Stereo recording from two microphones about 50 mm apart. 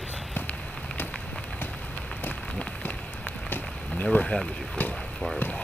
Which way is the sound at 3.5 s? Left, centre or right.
Left.